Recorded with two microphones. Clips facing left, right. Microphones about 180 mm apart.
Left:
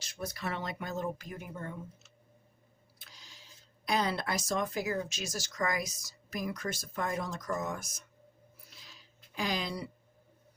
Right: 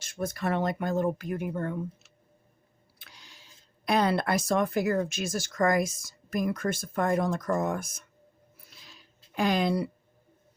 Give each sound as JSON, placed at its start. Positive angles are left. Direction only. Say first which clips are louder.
{"t": 0.0, "sound": "speech", "louder": "right 7 dB", "side_deg": -50}
{"t": 9.3, "sound": "speech", "louder": "right 9 dB", "side_deg": -55}